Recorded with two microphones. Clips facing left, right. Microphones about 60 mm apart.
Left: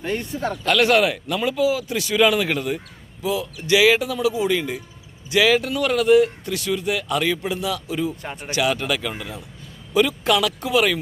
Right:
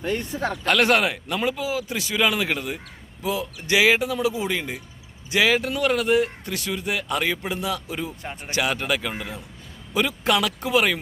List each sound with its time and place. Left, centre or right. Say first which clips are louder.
0.6 s speech: left 2 dB; right
1.0 s speech: left 2 dB; right
2.1 s speech: left 4 dB; centre
3.2 s speech: left 3 dB; right